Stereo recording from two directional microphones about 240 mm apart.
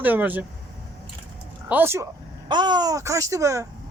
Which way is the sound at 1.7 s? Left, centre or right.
Centre.